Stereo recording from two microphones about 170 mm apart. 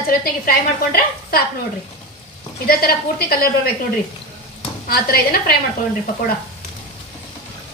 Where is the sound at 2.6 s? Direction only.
65° left (ahead or behind).